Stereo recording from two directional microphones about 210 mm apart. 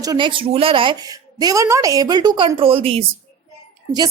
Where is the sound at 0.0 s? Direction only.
20° right (ahead or behind).